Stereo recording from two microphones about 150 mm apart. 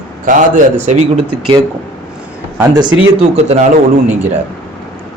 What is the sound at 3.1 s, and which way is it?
Speech, 45° right (ahead or behind).